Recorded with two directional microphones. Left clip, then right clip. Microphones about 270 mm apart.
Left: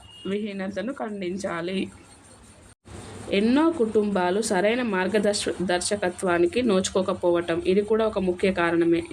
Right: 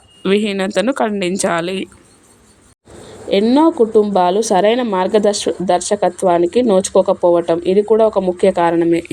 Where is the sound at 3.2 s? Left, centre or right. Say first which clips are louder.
Right 9 dB; centre.